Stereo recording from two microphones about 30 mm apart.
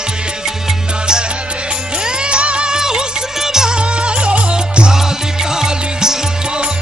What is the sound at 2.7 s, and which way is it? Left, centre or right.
Music, right.